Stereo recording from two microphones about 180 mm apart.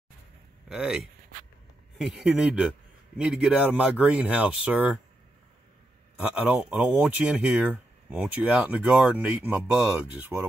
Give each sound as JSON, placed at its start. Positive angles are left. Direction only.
{"t": 0.7, "sound": "speech", "side_deg": -5}
{"t": 6.1, "sound": "speech", "side_deg": -5}